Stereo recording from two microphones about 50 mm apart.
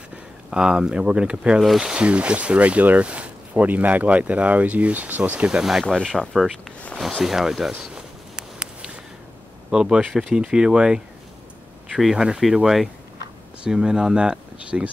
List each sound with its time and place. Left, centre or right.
0.5 s speech: centre
2.0 s speech: right
5.6 s speech: centre
6.0 s speech: centre
7.0 s speech: centre
7.8 s a sound: centre
9.7 s speech: centre
12.0 s speech: centre